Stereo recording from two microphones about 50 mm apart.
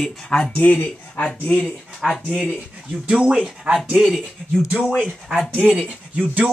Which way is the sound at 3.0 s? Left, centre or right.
Centre.